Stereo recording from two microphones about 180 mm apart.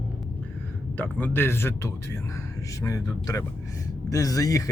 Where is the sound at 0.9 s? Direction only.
10° left (ahead or behind).